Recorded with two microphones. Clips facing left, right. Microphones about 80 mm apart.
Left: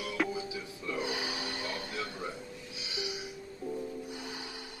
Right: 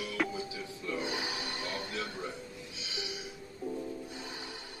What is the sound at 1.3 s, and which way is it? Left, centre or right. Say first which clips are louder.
Music: left 1 dB; left.